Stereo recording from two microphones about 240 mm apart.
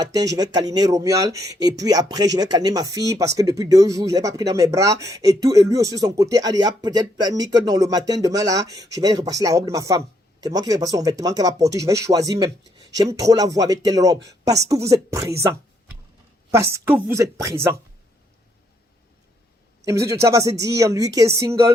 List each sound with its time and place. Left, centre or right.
0.0 s speech: centre
16.7 s speech: centre
19.8 s speech: centre